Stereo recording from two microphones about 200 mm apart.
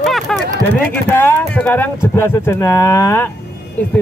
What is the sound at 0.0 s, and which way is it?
Run, centre (ahead or behind).